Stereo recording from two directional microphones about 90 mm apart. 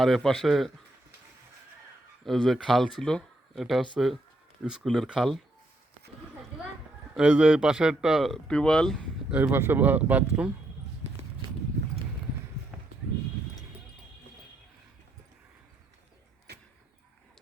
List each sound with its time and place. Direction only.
0.0 s speech: 5° left (ahead or behind)
2.2 s speech: centre (ahead or behind)
7.2 s speech: 15° right (ahead or behind)
8.4 s speech: 10° left (ahead or behind)
9.3 s speech: 25° right (ahead or behind)
12.7 s a sound: 10° right (ahead or behind)